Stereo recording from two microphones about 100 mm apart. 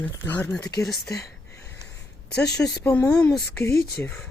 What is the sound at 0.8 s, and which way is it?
Speech, centre (ahead or behind).